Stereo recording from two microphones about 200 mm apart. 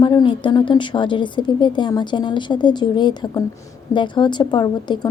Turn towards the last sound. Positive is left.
turn(degrees=20)  # may be behind; listen again after turning